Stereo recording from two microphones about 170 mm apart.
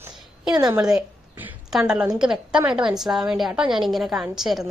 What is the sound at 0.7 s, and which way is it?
A woman's voice, 5° right (ahead or behind).